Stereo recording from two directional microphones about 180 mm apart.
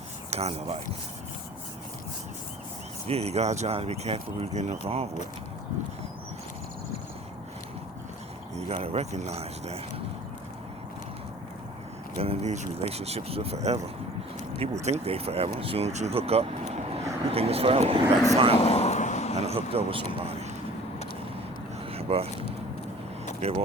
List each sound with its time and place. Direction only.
0.3 s speech: 35° right (ahead or behind)
3.1 s speech: 35° right (ahead or behind)
8.5 s speech: 35° right (ahead or behind)
12.2 s speech: 35° right (ahead or behind)
18.6 s a sound: 35° left (ahead or behind)
19.4 s speech: 35° right (ahead or behind)
21.9 s vehicle: 35° right (ahead or behind)
23.4 s speech: 35° right (ahead or behind)